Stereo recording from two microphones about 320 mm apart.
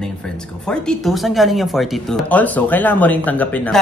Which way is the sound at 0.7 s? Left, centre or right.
Centre.